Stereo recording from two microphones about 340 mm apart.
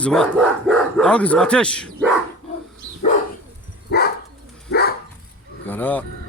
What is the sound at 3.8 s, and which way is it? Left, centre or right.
Dog, left.